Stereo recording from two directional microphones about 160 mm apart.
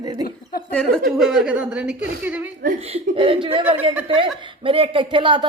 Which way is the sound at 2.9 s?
35° right (ahead or behind).